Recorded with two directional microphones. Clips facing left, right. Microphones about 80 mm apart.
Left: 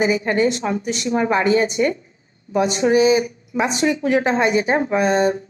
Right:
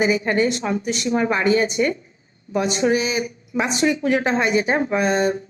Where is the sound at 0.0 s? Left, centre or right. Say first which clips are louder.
Left 1 dB; left.